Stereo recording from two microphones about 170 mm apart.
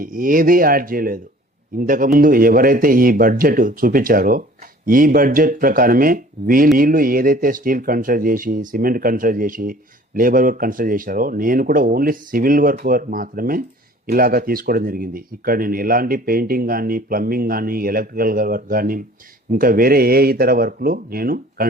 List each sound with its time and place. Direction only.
0.0 s speech: 55° right (ahead or behind)